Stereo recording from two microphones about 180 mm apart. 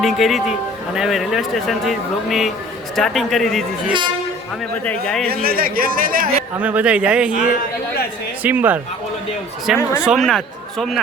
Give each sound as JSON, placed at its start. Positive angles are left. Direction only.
{"t": 0.0, "sound": "speech", "side_deg": 0}
{"t": 5.3, "sound": "speech", "side_deg": -55}
{"t": 6.6, "sound": "speech", "side_deg": -5}